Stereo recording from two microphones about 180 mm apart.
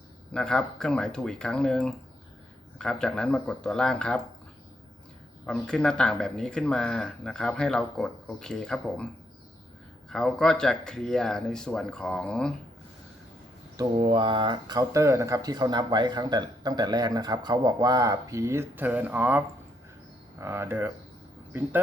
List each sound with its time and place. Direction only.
0.3 s speech: 5° left (ahead or behind)
5.5 s speech: 5° left (ahead or behind)
10.1 s speech: 5° left (ahead or behind)
14.0 s speech: 30° right (ahead or behind); by 19.4 s 10° right (ahead or behind)
20.4 s speech: 15° right (ahead or behind)